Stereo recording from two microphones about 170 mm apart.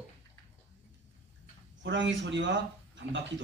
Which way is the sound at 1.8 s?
90° right.